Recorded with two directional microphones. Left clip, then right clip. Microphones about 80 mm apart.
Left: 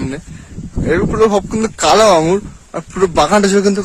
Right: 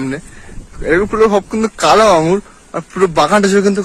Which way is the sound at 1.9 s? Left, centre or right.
Left.